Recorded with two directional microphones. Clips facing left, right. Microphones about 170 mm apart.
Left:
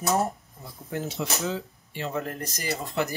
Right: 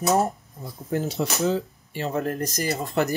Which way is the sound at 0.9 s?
35° right (ahead or behind).